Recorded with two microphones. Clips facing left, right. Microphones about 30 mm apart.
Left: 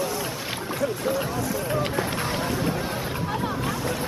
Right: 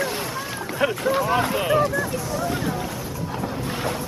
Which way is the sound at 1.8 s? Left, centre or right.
Left.